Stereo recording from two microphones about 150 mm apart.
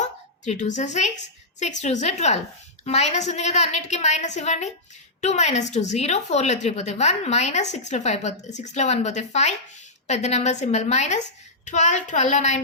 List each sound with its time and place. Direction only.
0.0 s a woman's voice: 50° left (ahead or behind)